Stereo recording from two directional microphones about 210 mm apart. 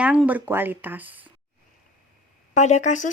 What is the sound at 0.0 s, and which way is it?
Speech, 5° right (ahead or behind).